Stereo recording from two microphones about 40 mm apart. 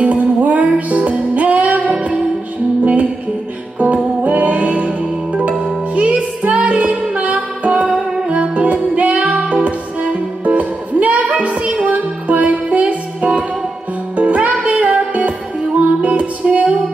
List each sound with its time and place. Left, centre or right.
0.0 s music: right